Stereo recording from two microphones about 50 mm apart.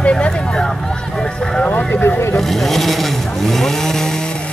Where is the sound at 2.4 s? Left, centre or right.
Centre.